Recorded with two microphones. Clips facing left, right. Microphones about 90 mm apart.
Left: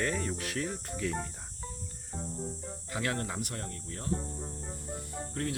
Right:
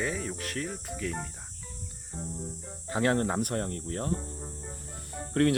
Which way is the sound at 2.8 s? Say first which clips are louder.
Right 8 dB; 35° right (ahead or behind).